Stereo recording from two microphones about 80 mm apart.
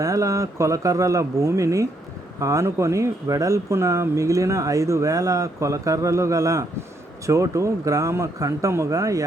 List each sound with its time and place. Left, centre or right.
0.0 s speech: right